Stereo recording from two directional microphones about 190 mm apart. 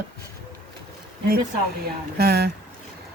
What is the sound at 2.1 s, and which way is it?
Speech, 55° right (ahead or behind).